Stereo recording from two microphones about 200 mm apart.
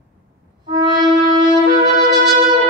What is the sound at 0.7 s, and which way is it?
Music, 20° right (ahead or behind).